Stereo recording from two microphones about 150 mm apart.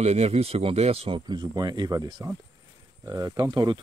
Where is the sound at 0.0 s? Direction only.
45° right (ahead or behind).